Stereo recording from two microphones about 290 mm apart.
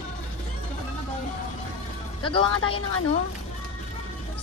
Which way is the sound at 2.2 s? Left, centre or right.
Centre.